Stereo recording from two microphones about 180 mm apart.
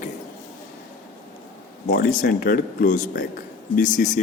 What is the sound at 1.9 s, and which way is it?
Speech, 55° left (ahead or behind).